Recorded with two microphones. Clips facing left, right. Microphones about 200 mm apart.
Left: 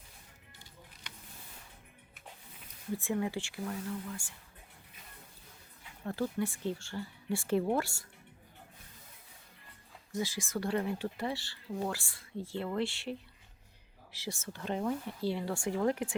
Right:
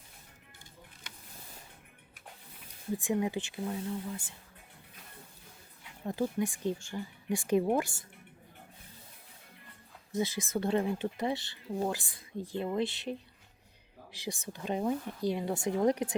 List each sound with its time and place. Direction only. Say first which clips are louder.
3.0 s speech: right 3 dB; 15° right (ahead or behind)
6.1 s speech: right 2 dB; 15° right (ahead or behind)
10.2 s speech: right 3 dB; 20° right (ahead or behind)